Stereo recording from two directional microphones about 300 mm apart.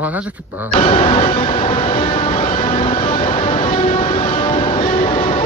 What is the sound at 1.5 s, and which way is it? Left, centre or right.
Train, left.